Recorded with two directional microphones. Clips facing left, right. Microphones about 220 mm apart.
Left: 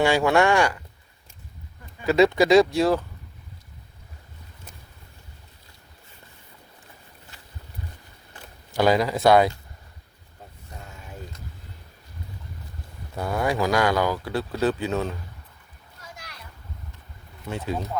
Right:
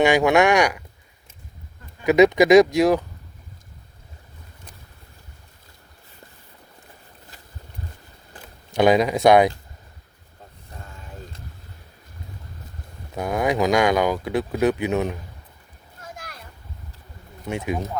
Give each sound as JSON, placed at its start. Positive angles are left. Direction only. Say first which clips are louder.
{"t": 0.0, "sound": "speech", "louder": "right 3 dB", "side_deg": -15}
{"t": 2.0, "sound": "speech", "louder": "right 4 dB", "side_deg": -15}
{"t": 8.7, "sound": "speech", "louder": "right 3 dB", "side_deg": -20}
{"t": 13.1, "sound": "speech", "louder": "right 3 dB", "side_deg": -15}
{"t": 16.0, "sound": "a sound", "louder": "right 5 dB", "side_deg": -50}
{"t": 17.5, "sound": "speech", "louder": "right 3 dB", "side_deg": -15}